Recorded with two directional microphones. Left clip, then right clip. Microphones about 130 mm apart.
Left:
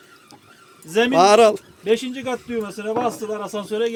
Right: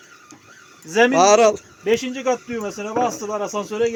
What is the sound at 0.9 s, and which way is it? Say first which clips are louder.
Speech: right 3 dB; 15° left (ahead or behind).